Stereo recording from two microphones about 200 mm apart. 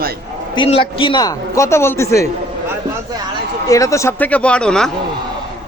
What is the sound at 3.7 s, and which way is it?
A man's voice, 15° left (ahead or behind).